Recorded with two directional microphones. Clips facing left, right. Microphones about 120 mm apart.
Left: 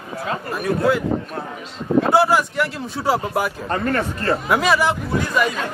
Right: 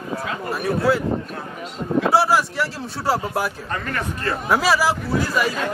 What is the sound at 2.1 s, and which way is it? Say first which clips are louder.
Speech: even; centre (ahead or behind).